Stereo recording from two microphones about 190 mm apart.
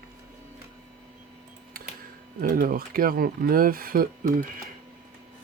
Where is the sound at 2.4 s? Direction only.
50° right (ahead or behind).